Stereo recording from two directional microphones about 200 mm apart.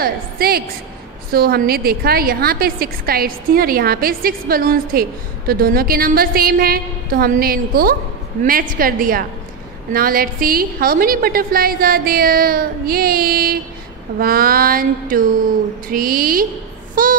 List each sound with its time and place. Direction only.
0.0 s a woman's voice: 50° right (ahead or behind)
17.0 s child singing: 45° right (ahead or behind)